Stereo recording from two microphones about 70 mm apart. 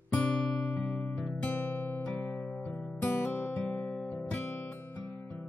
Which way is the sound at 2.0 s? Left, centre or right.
Centre.